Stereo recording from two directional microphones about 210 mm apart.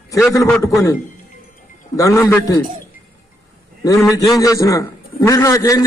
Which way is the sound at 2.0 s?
15° left (ahead or behind).